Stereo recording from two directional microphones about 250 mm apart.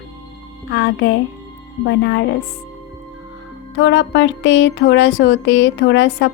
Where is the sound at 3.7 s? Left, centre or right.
Left.